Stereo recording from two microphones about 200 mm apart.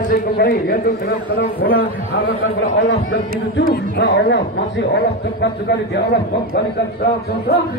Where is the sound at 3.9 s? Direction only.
60° left (ahead or behind).